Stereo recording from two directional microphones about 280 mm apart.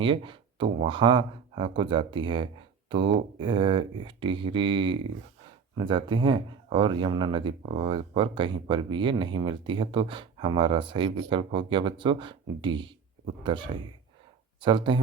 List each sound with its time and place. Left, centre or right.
0.0 s speech: centre
14.6 s speech: centre